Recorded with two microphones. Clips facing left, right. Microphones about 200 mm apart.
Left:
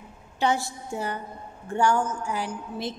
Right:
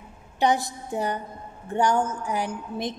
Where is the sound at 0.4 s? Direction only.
20° right (ahead or behind).